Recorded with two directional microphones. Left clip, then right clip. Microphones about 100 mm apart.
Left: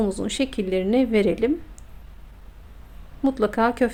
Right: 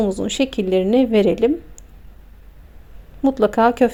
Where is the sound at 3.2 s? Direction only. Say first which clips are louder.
Right 6 dB; 20° right (ahead or behind).